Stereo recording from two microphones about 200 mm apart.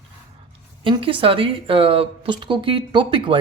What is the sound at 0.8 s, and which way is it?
Speech, 25° right (ahead or behind).